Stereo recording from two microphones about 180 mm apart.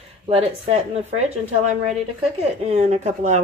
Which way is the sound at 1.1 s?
40° right (ahead or behind).